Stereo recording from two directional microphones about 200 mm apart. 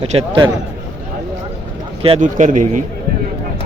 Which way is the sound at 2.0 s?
35° right (ahead or behind).